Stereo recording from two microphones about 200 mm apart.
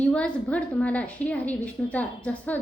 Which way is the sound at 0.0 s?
5° left (ahead or behind).